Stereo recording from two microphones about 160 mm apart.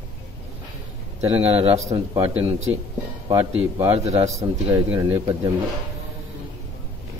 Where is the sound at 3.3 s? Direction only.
15° right (ahead or behind).